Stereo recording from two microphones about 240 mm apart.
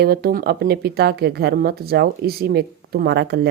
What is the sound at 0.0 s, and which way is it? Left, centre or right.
Speech, right.